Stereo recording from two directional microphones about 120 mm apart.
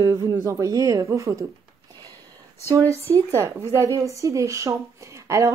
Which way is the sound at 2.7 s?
25° right (ahead or behind).